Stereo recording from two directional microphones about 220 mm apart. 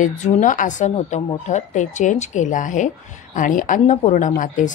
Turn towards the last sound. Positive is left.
turn(degrees=35)  # may be behind; listen again after turning